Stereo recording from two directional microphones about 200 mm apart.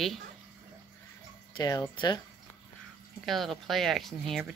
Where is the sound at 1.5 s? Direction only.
20° left (ahead or behind).